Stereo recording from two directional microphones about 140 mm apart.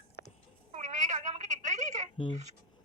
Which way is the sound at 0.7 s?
60° right (ahead or behind).